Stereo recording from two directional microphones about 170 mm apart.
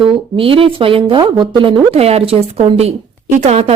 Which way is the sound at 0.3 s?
30° right (ahead or behind).